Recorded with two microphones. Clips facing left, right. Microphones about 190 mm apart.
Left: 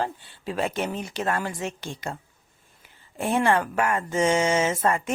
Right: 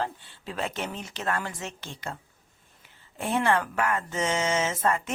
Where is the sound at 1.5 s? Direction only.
15° left (ahead or behind).